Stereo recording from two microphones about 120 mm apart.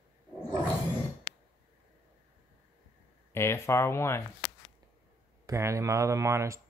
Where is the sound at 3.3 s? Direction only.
20° left (ahead or behind).